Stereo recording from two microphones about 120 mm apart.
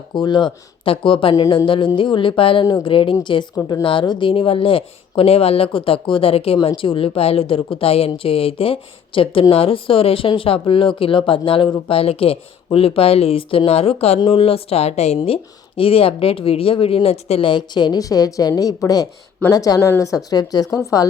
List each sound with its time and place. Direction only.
0.1 s speech: 40° left (ahead or behind); by 17.5 s 55° left (ahead or behind)
17.5 s a woman's voice: 40° left (ahead or behind)